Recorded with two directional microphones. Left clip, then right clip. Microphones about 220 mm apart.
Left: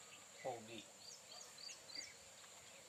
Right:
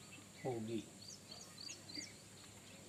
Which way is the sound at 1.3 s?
45° right (ahead or behind).